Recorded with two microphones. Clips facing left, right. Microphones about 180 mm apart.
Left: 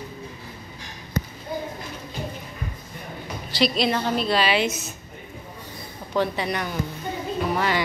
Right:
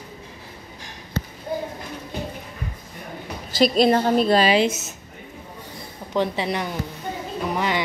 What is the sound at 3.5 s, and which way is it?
A woman's voice, 45° right (ahead or behind).